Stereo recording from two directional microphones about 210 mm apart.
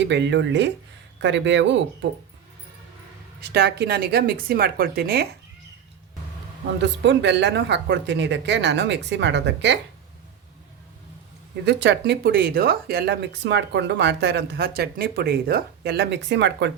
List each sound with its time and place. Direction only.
0.0 s speech: 55° right (ahead or behind)
3.4 s speech: 50° right (ahead or behind)
6.8 s speech: 55° right (ahead or behind)
11.6 s speech: 55° right (ahead or behind)